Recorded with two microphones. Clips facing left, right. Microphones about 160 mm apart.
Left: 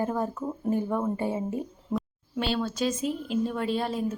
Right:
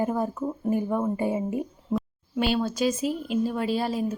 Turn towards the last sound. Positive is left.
turn(degrees=-5)  # may be behind; listen again after turning